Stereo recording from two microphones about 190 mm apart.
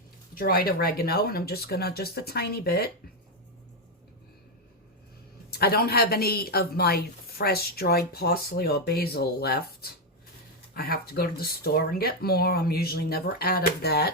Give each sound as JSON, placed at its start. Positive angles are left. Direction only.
{"t": 0.3, "sound": "a woman's voice", "side_deg": 50}
{"t": 5.5, "sound": "a woman's voice", "side_deg": 55}